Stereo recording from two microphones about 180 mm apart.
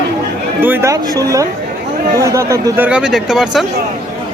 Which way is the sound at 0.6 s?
15° right (ahead or behind).